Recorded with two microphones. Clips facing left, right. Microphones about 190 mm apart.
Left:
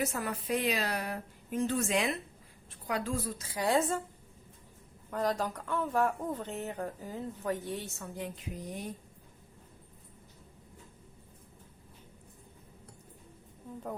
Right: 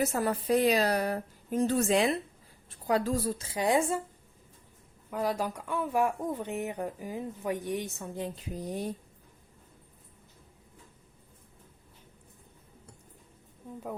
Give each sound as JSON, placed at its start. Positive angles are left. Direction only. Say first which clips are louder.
{"t": 0.1, "sound": "a woman's voice", "louder": "right 6 dB", "side_deg": -35}
{"t": 5.1, "sound": "speech", "louder": "right 1 dB", "side_deg": -10}